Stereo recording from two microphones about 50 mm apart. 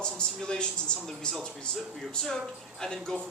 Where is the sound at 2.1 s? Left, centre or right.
Centre.